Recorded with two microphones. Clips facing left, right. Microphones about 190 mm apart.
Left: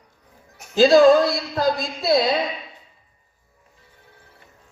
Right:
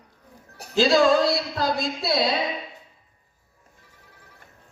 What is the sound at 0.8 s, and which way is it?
A man's voice, 55° left (ahead or behind).